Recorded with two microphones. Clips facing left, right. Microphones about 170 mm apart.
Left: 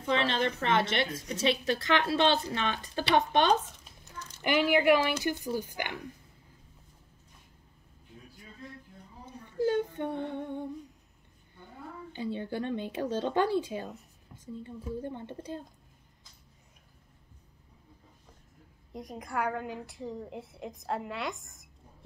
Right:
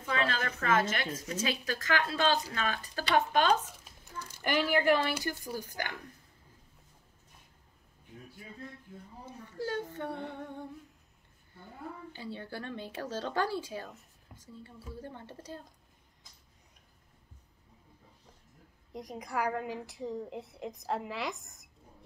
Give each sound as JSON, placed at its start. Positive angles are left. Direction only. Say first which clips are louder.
{"t": 0.0, "sound": "speech", "louder": "left 4 dB", "side_deg": 25}
{"t": 4.4, "sound": "speech", "louder": "left 3 dB", "side_deg": 10}
{"t": 9.6, "sound": "female singing", "louder": "left 7 dB", "side_deg": 20}
{"t": 12.1, "sound": "speech", "louder": "left 12 dB", "side_deg": 20}
{"t": 18.9, "sound": "a woman's voice", "louder": "left 1 dB", "side_deg": 0}